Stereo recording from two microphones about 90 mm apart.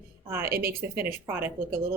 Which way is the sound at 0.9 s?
25° right (ahead or behind).